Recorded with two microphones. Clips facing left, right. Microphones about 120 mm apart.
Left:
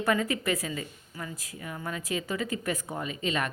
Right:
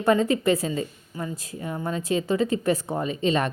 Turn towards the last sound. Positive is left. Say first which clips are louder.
# right 7 dB
turn(degrees=-30)  # may be behind; listen again after turning